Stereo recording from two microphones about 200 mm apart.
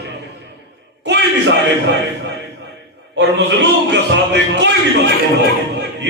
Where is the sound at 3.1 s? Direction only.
60° right (ahead or behind).